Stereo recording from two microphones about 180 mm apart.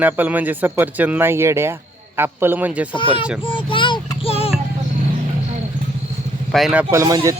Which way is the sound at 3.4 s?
30° left (ahead or behind).